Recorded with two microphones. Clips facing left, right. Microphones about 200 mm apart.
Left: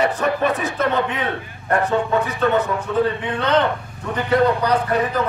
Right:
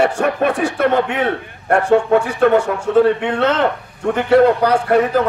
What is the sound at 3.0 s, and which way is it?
Speech, 75° right (ahead or behind).